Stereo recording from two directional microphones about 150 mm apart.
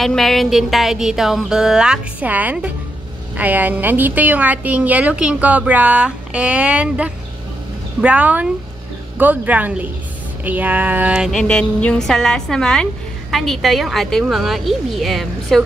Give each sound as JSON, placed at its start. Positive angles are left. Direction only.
{"t": 0.0, "sound": "music", "side_deg": 0}
{"t": 3.3, "sound": "a woman's voice", "side_deg": -10}
{"t": 10.4, "sound": "music", "side_deg": -10}